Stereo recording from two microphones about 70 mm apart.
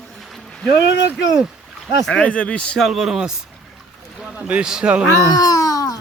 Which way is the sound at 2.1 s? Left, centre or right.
Centre.